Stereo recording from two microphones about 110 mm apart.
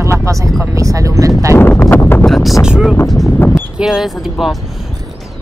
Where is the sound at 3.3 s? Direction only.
20° left (ahead or behind).